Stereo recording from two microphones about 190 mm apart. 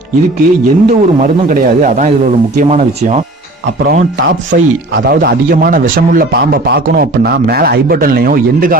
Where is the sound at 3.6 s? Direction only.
55° right (ahead or behind).